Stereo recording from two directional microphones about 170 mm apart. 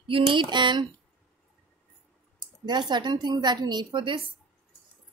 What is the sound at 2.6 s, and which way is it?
Speech, 25° right (ahead or behind).